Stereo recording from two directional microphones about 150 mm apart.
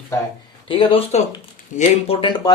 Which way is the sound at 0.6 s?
35° left (ahead or behind).